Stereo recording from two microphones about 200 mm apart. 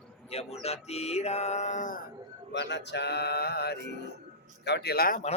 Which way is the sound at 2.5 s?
60° left (ahead or behind).